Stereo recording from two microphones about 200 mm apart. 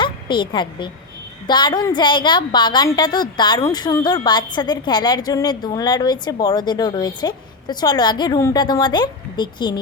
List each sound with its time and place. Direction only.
0.0 s a woman's voice: 25° left (ahead or behind)